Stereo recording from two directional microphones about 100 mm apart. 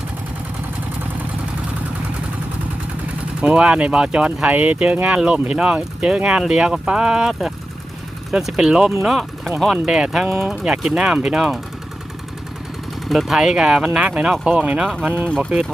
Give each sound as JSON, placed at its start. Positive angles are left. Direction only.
{"t": 3.4, "sound": "speech", "side_deg": -10}
{"t": 10.2, "sound": "speech", "side_deg": -25}
{"t": 10.5, "sound": "speech", "side_deg": -5}
{"t": 13.1, "sound": "speech", "side_deg": 0}